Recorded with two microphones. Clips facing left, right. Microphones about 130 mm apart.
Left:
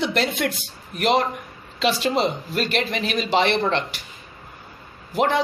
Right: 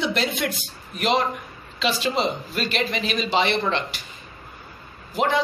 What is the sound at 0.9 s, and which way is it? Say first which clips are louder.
A woman's voice: left 2 dB; 60° left (ahead or behind).